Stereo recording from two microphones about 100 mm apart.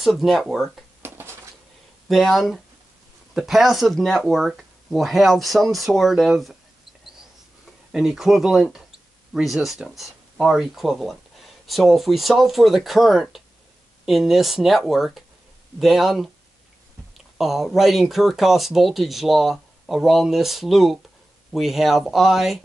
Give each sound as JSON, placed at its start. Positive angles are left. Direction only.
{"t": 0.0, "sound": "speech", "side_deg": 0}
{"t": 1.0, "sound": "a sound", "side_deg": -25}
{"t": 2.0, "sound": "speech", "side_deg": 0}
{"t": 7.9, "sound": "speech", "side_deg": -5}
{"t": 17.4, "sound": "speech", "side_deg": -5}